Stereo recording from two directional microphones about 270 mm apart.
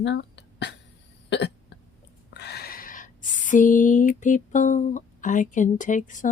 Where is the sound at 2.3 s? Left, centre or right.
Left.